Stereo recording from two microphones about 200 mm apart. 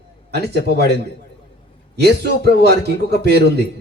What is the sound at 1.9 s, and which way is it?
A man's voice, 55° right (ahead or behind).